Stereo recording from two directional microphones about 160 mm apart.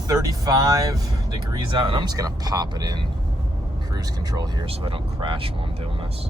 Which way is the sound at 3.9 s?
25° right (ahead or behind).